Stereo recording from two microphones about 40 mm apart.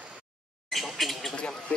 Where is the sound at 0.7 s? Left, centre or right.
Centre.